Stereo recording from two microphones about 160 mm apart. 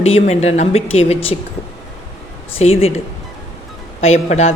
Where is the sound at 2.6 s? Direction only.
40° left (ahead or behind).